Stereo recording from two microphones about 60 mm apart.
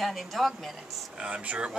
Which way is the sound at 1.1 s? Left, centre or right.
Centre.